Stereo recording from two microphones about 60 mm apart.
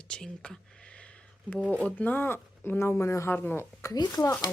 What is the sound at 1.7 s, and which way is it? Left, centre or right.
Speech, left.